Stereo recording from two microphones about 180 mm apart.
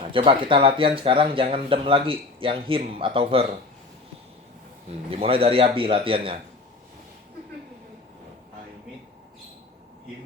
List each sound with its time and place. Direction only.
0.0 s speech: 30° right (ahead or behind)
5.1 s a man's voice: 30° right (ahead or behind)